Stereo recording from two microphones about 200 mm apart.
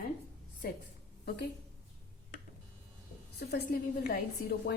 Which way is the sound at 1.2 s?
50° left (ahead or behind).